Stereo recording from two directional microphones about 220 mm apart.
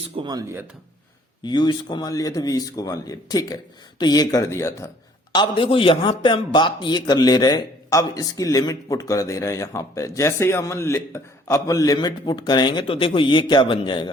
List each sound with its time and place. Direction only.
0.2 s speech: 15° right (ahead or behind)
1.5 s a man's voice: 20° left (ahead or behind)